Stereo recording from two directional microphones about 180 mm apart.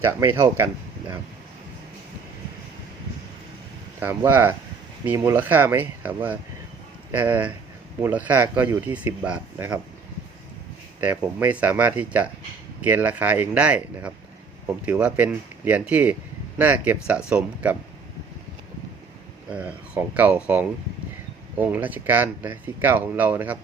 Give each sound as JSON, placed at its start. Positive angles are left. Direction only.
{"t": 0.0, "sound": "speech", "side_deg": -15}
{"t": 4.0, "sound": "speech", "side_deg": -15}
{"t": 11.0, "sound": "speech", "side_deg": -10}
{"t": 19.5, "sound": "speech", "side_deg": -5}